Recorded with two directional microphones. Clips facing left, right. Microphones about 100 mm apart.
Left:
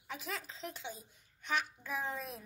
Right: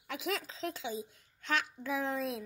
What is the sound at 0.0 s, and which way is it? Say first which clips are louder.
Speech: right 6 dB; 90° right.